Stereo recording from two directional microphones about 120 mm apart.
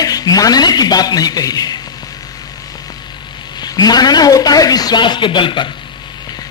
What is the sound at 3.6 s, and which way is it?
Speech, 35° left (ahead or behind).